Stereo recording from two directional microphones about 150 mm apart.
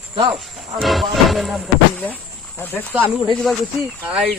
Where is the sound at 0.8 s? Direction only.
Centre (ahead or behind).